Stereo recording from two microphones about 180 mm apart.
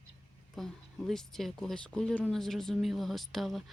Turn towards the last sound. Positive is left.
turn(degrees=0)  # may be behind; listen again after turning